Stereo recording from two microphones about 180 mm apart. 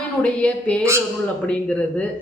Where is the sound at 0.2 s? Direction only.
5° left (ahead or behind).